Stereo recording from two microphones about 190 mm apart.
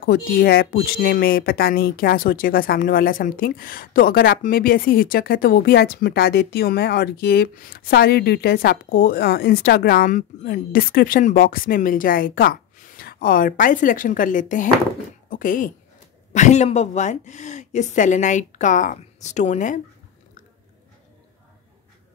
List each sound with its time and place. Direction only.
0.0 s a woman's voice: 55° left (ahead or behind)